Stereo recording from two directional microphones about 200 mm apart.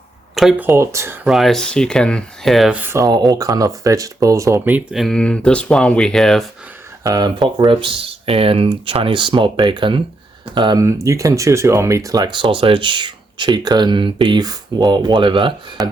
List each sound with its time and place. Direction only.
0.3 s speech: centre (ahead or behind)
0.7 s speech: 15° right (ahead or behind); by 6.4 s centre (ahead or behind)
7.0 s speech: 20° right (ahead or behind)